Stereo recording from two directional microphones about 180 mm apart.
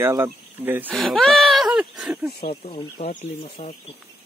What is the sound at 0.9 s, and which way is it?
Speech, 5° left (ahead or behind).